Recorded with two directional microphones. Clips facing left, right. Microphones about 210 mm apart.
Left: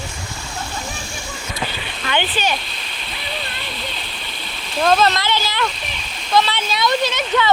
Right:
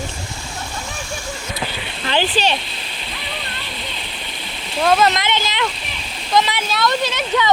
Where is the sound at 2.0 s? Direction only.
35° right (ahead or behind).